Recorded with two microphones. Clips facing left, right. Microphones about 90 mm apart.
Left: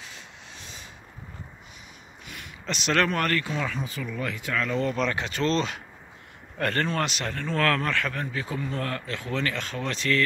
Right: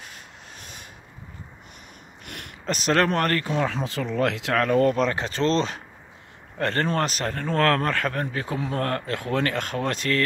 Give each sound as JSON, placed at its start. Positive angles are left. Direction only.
{"t": 0.0, "sound": "rub", "side_deg": -50}
{"t": 2.2, "sound": "a sound", "side_deg": -65}
{"t": 2.6, "sound": "speech", "side_deg": -40}
{"t": 3.7, "sound": "speech", "side_deg": -85}
{"t": 5.0, "sound": "speech", "side_deg": -35}
{"t": 6.9, "sound": "speech", "side_deg": -40}
{"t": 8.5, "sound": "speech", "side_deg": -60}